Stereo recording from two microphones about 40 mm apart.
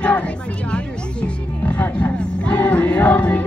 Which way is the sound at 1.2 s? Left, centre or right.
Left.